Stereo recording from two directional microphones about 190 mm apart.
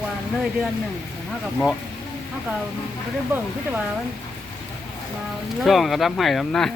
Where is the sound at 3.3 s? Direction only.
10° right (ahead or behind).